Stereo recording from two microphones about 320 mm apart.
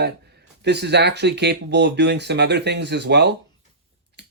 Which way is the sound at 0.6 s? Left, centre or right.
Right.